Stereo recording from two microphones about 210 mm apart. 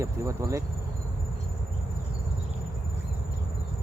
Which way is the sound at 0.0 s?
15° right (ahead or behind).